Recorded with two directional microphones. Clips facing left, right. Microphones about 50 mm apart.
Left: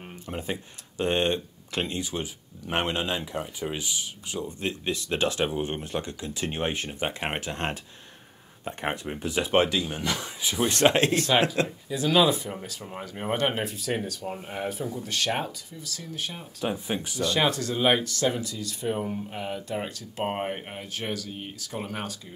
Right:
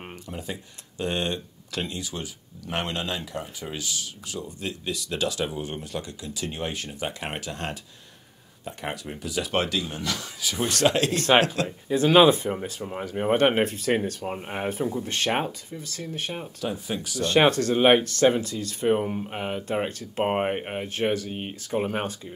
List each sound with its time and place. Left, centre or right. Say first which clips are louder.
0.3 s speech: left 4 dB; left
11.9 s speech: right 6 dB; right
16.6 s speech: left 2 dB; left
17.2 s speech: right 6 dB; right